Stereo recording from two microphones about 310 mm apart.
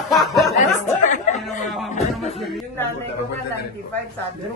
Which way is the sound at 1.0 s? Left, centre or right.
Left.